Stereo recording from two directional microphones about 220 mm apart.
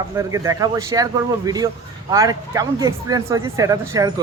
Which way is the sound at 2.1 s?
15° right (ahead or behind).